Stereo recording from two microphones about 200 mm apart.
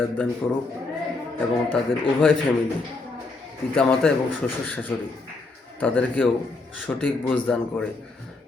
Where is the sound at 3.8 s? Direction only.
5° left (ahead or behind).